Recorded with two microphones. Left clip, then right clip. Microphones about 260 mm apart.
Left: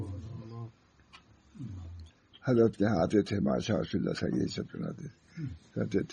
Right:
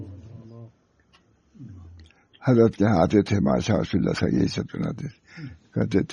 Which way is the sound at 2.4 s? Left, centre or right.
Right.